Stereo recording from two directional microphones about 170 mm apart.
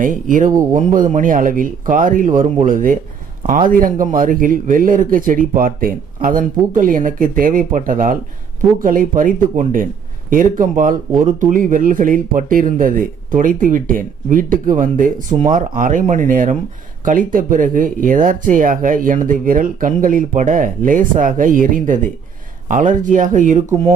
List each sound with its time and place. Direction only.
0.0 s speech: 50° right (ahead or behind)